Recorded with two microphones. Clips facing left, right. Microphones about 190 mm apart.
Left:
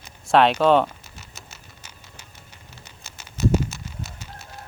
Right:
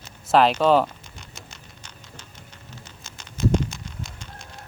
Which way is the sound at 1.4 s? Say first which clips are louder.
Right 1 dB; 5° left (ahead or behind).